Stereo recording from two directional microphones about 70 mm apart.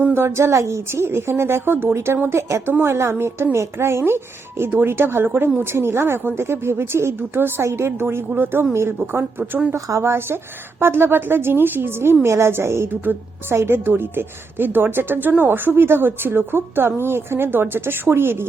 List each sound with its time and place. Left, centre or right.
0.1 s a woman's voice: right
12.9 s a woman's voice: right